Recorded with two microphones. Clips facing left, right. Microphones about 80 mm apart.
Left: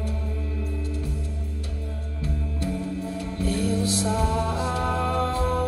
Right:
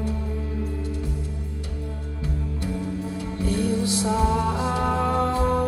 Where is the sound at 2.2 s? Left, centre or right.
Centre.